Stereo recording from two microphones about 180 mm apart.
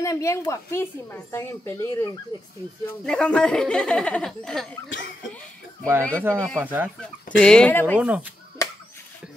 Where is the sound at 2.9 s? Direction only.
5° left (ahead or behind).